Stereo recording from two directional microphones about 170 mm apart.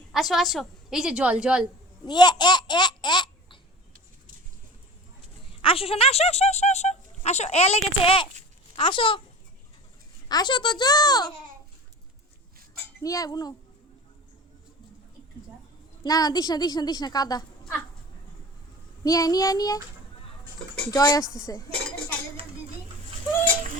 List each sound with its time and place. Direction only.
0.1 s a woman's voice: centre (ahead or behind)
2.0 s speech: 25° left (ahead or behind)
5.6 s speech: 35° left (ahead or behind)
10.2 s a woman's voice: 25° left (ahead or behind)
13.0 s a woman's voice: 20° left (ahead or behind)
16.0 s a woman's voice: 20° left (ahead or behind)
19.0 s a woman's voice: 20° left (ahead or behind)
20.9 s a woman's voice: 20° left (ahead or behind)
21.7 s dishes: 5° left (ahead or behind)